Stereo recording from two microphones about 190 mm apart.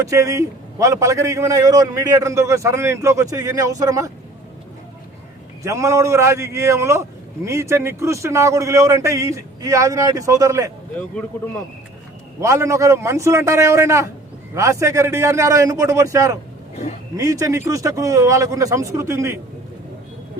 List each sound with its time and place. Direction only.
0.0 s a man's voice: 15° right (ahead or behind)
5.6 s a man's voice: 15° right (ahead or behind)
12.4 s a man's voice: 15° right (ahead or behind)